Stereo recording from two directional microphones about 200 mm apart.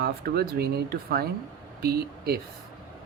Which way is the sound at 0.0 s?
50° right (ahead or behind).